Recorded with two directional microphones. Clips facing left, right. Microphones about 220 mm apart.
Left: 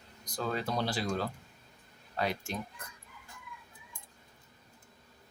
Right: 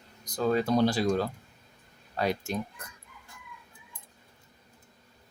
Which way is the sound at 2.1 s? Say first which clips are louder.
Right 4 dB; 40° right (ahead or behind).